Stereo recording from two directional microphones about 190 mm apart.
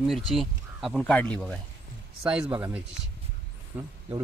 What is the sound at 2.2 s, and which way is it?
Speech, 5° right (ahead or behind).